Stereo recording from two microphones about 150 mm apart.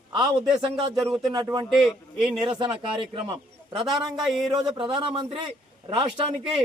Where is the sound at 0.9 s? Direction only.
Centre (ahead or behind).